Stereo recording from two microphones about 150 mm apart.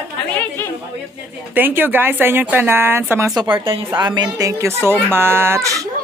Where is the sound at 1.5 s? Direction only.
15° right (ahead or behind).